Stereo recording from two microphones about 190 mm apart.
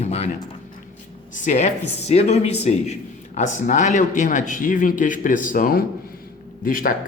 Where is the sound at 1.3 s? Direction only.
40° left (ahead or behind).